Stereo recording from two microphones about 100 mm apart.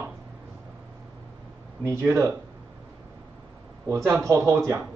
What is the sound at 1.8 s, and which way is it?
Speech, 25° right (ahead or behind).